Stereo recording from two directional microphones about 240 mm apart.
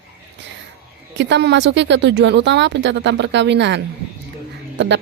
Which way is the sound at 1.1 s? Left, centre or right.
Right.